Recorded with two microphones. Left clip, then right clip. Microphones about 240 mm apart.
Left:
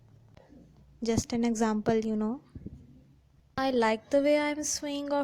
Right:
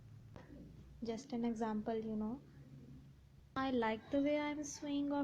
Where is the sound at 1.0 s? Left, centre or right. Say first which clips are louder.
Left 13 dB; left.